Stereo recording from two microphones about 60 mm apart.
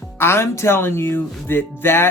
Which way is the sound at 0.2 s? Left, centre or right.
Left.